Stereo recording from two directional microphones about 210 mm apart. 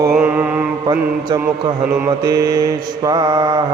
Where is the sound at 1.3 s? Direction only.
15° right (ahead or behind).